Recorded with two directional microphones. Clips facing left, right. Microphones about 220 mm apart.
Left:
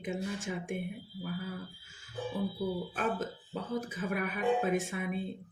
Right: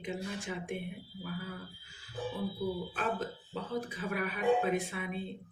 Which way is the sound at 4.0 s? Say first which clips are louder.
Left 3 dB; 50° left (ahead or behind).